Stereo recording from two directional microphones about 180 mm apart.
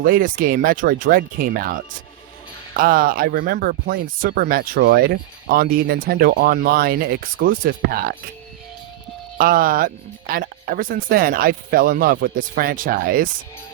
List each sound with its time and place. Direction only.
0.0 s speech: 50° right (ahead or behind)
9.4 s speech: 55° right (ahead or behind)